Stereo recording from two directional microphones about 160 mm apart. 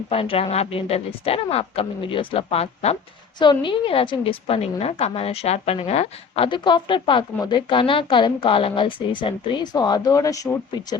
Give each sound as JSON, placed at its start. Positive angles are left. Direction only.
{"t": 0.1, "sound": "a woman's voice", "side_deg": 35}
{"t": 3.3, "sound": "a woman's voice", "side_deg": 30}